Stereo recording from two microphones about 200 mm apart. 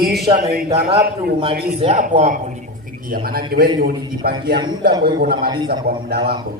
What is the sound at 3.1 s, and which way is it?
A man's voice, 50° right (ahead or behind).